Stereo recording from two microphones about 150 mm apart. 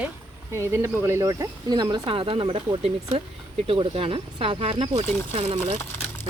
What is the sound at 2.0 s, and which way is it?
Speech, 40° right (ahead or behind).